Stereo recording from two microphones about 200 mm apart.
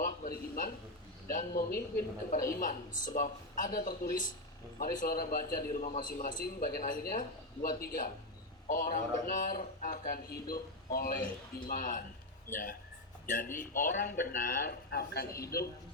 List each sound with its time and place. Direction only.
0.0 s a sound: 45° left (ahead or behind)
1.3 s a man's voice: 45° left (ahead or behind)
13.2 s a man's voice: 40° left (ahead or behind)